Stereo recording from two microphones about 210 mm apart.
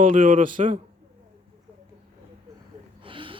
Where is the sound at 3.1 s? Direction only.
25° right (ahead or behind).